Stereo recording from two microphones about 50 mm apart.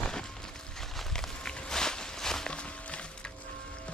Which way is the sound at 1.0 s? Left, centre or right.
Centre.